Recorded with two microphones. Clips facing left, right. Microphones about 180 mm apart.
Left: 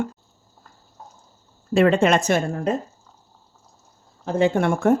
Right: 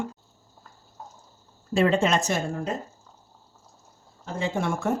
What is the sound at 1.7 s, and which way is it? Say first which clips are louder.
Speech: left 5 dB; 65° left (ahead or behind).